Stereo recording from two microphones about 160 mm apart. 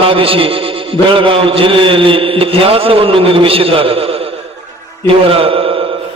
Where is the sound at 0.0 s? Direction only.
35° right (ahead or behind).